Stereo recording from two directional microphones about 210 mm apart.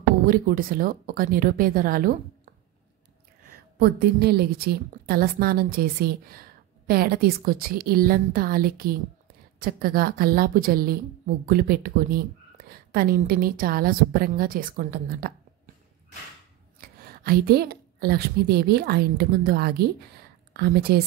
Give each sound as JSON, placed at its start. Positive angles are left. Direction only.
{"t": 0.2, "sound": "speech", "side_deg": -40}
{"t": 3.4, "sound": "speech", "side_deg": -45}
{"t": 16.8, "sound": "a woman's voice", "side_deg": -45}